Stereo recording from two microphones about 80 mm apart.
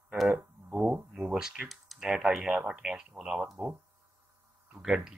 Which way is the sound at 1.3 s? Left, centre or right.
Centre.